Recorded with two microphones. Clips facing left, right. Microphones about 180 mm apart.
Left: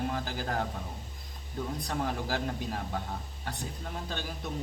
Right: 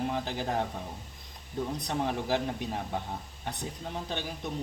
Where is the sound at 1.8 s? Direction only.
20° right (ahead or behind).